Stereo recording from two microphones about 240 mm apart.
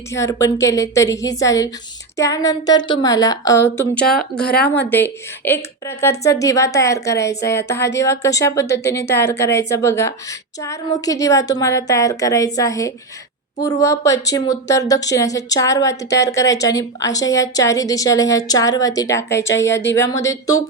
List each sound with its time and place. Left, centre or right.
0.1 s a woman's voice: centre
4.6 s a woman's voice: left
4.9 s speech: centre